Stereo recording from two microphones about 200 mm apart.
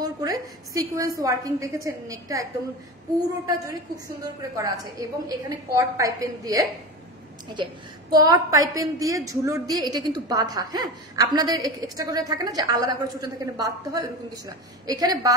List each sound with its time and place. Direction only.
0.0 s a woman's voice: 20° right (ahead or behind)
3.4 s a woman's voice: 20° right (ahead or behind)
8.1 s a woman's voice: 20° right (ahead or behind)